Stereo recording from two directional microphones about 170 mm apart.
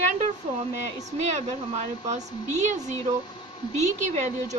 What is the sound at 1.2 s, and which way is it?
A woman's voice, 40° right (ahead or behind).